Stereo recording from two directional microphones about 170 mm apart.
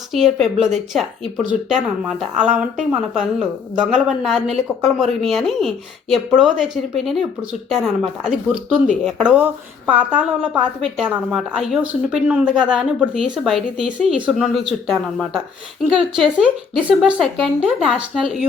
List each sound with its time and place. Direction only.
0.1 s a woman's voice: centre (ahead or behind)